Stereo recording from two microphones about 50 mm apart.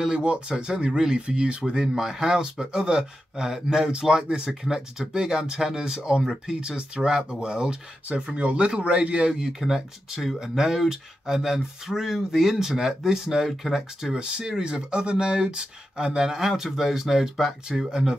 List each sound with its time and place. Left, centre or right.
0.0 s speech: centre
8.1 s speech: right; by 14.1 s centre
14.1 s speech: centre